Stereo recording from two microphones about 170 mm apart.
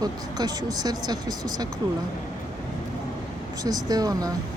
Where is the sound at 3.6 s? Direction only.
20° right (ahead or behind).